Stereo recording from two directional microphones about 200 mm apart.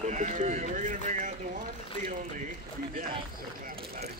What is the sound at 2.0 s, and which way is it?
Speech, 40° right (ahead or behind).